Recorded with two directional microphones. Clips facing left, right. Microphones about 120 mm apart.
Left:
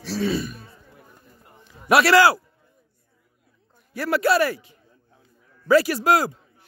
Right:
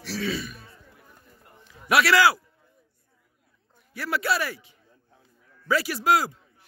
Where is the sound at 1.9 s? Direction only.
35° left (ahead or behind).